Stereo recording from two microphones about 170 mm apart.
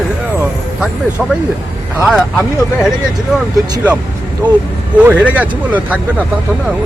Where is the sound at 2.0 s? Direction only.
5° right (ahead or behind).